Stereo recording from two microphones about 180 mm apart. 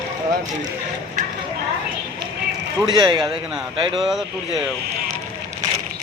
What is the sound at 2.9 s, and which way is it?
A man's voice, 25° right (ahead or behind).